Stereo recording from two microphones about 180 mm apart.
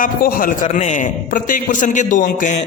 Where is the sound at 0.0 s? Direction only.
50° left (ahead or behind).